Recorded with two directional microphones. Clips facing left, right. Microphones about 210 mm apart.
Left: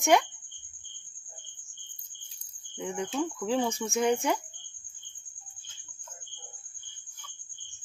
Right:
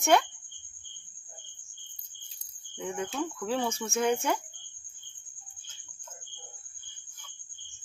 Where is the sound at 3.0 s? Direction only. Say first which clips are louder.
Left 3 dB; 15° left (ahead or behind).